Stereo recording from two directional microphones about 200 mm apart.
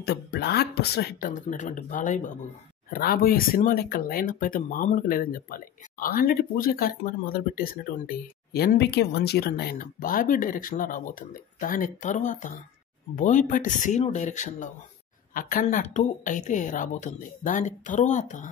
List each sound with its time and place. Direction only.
0.0 s a woman's voice: 55° left (ahead or behind); by 18.5 s 40° left (ahead or behind)